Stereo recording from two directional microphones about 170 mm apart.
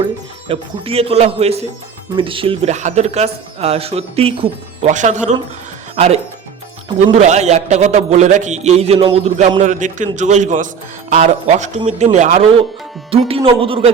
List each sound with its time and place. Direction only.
0.4 s speech: 35° right (ahead or behind)
4.9 s a man's voice: 45° right (ahead or behind)
7.2 s a man's voice: 40° right (ahead or behind)